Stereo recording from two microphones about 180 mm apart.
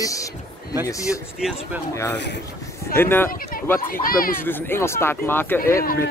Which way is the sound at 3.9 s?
55° left (ahead or behind).